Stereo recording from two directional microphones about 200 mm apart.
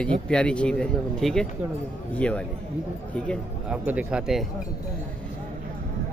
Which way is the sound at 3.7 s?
5° right (ahead or behind).